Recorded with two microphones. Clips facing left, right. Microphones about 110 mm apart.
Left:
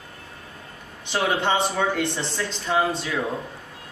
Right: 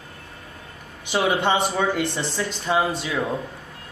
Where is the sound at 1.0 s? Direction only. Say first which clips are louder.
Right 2 dB; 5° right (ahead or behind).